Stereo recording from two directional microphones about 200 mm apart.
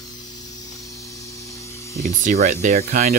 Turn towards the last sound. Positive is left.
turn(degrees=-50)  # may be behind; listen again after turning